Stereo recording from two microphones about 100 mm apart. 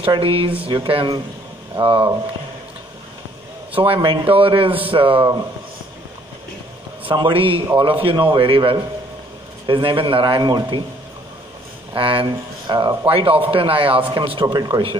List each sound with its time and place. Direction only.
0.0 s a man's voice: 65° right (ahead or behind)
3.7 s a man's voice: 65° right (ahead or behind)
7.1 s a man's voice: 55° right (ahead or behind)
11.9 s speech: 60° right (ahead or behind)
13.0 s a man's voice: 70° right (ahead or behind)
14.4 s speech: 50° right (ahead or behind)